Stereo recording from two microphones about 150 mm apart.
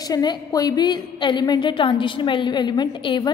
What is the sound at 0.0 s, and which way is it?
A woman's voice, 25° left (ahead or behind).